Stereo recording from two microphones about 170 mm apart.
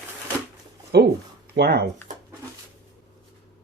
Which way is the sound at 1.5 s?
75° right (ahead or behind).